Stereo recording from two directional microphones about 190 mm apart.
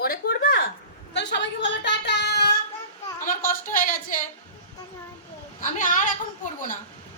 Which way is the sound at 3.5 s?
45° left (ahead or behind).